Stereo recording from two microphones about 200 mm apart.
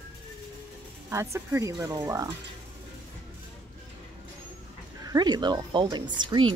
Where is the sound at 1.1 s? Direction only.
15° right (ahead or behind).